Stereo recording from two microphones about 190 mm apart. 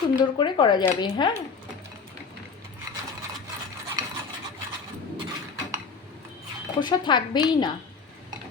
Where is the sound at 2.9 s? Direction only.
20° right (ahead or behind).